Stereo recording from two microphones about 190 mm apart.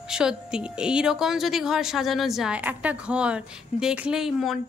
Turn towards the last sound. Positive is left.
turn(degrees=0)  # may be behind; listen again after turning